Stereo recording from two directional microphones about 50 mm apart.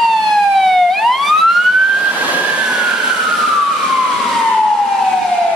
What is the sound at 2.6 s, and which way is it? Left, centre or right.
Vehicle, centre.